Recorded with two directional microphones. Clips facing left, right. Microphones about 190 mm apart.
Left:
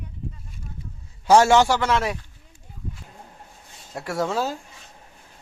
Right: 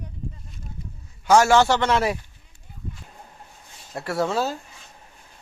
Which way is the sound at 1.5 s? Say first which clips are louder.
Even; 10° left (ahead or behind).